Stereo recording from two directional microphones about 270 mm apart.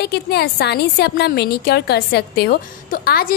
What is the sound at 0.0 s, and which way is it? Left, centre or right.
A woman's voice, left.